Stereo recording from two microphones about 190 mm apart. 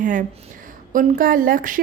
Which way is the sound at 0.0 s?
45° right (ahead or behind).